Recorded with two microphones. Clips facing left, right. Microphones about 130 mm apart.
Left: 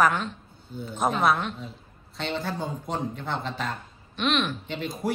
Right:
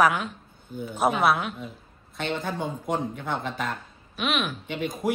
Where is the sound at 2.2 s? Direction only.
50° right (ahead or behind).